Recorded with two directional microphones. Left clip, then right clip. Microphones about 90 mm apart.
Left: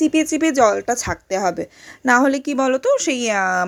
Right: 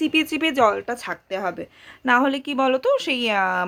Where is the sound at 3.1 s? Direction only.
50° left (ahead or behind).